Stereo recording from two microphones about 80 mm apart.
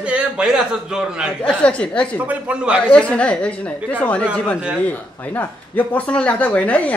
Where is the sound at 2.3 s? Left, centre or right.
Centre.